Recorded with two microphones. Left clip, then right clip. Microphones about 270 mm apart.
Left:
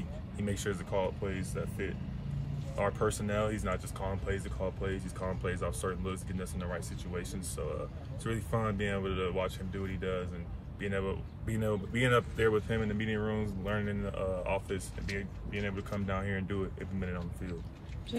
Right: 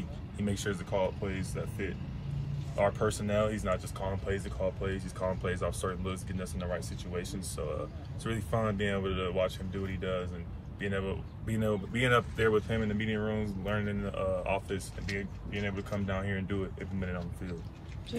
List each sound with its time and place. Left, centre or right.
0.4 s speech: centre